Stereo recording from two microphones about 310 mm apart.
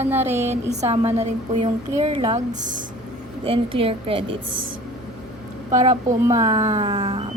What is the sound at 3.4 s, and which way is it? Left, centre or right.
Speech, centre.